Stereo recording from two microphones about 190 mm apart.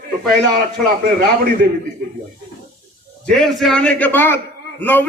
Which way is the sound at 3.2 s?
Centre (ahead or behind).